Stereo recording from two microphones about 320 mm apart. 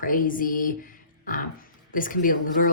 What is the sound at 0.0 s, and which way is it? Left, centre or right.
Speech, left.